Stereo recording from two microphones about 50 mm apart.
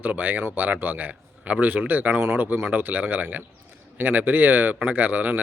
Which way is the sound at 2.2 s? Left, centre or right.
Right.